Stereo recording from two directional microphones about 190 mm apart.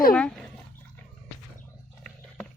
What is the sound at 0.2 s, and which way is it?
Dog, 5° left (ahead or behind).